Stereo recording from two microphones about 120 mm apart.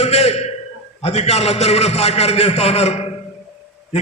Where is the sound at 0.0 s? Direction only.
60° left (ahead or behind).